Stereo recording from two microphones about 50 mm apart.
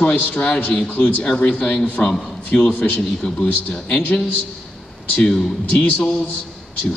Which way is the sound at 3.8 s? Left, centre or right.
Left.